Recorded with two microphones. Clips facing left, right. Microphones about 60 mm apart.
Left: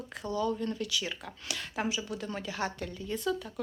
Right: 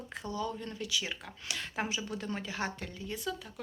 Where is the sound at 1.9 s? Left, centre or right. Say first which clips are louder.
Left 2 dB; right.